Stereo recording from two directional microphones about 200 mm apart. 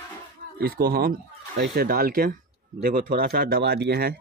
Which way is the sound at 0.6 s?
50° right (ahead or behind).